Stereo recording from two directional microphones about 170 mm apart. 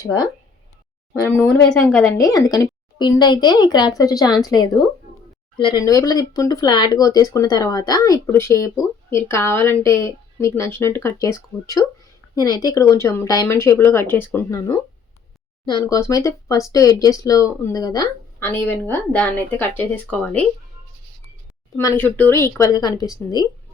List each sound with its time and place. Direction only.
0.0 s a woman's voice: 20° left (ahead or behind)
21.8 s a woman's voice: 15° left (ahead or behind)